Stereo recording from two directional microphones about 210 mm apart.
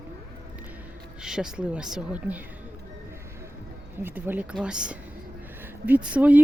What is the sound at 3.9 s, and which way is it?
Speech, 10° right (ahead or behind).